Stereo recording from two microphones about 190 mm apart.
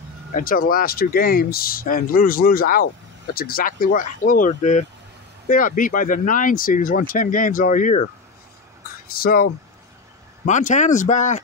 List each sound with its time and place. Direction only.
0.3 s speech: 50° left (ahead or behind)
9.1 s speech: 50° left (ahead or behind)
10.4 s speech: 40° left (ahead or behind)